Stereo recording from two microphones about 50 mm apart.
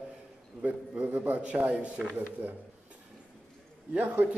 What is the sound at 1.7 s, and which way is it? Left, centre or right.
Speech, centre.